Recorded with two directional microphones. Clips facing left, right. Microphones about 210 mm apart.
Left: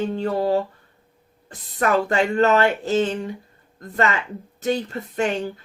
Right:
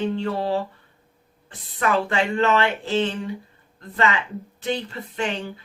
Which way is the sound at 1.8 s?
40° left (ahead or behind).